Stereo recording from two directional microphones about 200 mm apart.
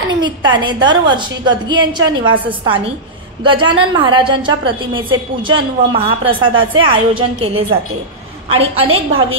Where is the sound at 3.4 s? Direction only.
25° right (ahead or behind).